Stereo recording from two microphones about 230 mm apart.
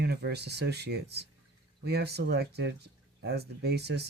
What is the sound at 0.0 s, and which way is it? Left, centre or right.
Speech, right.